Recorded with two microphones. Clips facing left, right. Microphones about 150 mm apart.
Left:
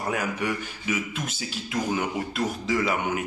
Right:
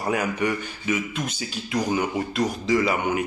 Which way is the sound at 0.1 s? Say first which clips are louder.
Right 5 dB; centre (ahead or behind).